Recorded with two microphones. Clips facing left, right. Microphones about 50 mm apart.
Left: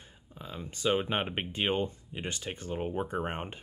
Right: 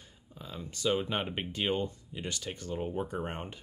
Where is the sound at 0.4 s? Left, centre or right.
Centre.